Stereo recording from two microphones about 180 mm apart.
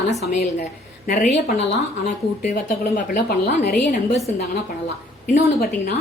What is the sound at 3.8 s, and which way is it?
Speech, 35° left (ahead or behind).